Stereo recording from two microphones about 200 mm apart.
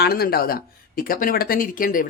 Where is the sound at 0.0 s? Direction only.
50° left (ahead or behind).